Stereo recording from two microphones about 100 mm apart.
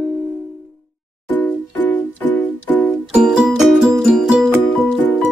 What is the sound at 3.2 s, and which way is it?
Music, 5° right (ahead or behind).